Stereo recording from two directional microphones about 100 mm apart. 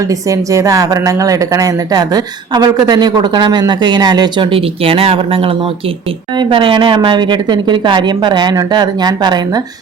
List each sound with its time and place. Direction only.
0.1 s a woman's voice: 35° right (ahead or behind); by 5.5 s 65° right (ahead or behind)
6.3 s a woman's voice: 55° right (ahead or behind)